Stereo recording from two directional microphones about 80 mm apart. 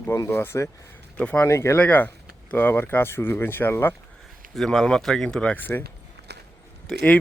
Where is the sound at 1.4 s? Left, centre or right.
Left.